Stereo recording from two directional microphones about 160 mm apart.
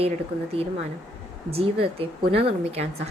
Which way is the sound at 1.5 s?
35° right (ahead or behind).